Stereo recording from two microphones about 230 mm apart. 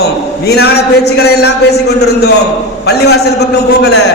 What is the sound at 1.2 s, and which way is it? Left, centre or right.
Speech, left.